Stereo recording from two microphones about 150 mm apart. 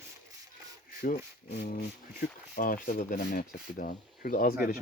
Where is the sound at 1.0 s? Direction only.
80° left.